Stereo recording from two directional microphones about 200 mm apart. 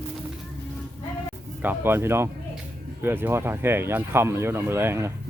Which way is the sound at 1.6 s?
10° right (ahead or behind).